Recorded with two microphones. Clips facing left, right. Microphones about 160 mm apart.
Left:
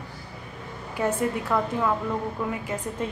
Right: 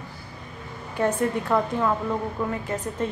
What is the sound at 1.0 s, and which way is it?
A woman's voice, 10° left (ahead or behind).